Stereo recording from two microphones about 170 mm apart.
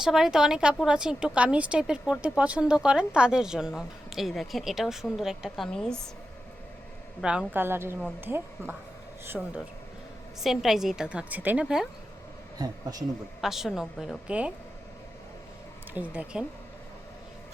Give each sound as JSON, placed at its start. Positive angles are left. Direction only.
{"t": 0.0, "sound": "speech", "side_deg": -5}
{"t": 7.2, "sound": "a woman's voice", "side_deg": -5}
{"t": 10.4, "sound": "speech", "side_deg": 0}
{"t": 12.5, "sound": "speech", "side_deg": -20}
{"t": 13.4, "sound": "speech", "side_deg": 0}
{"t": 16.1, "sound": "speech", "side_deg": -5}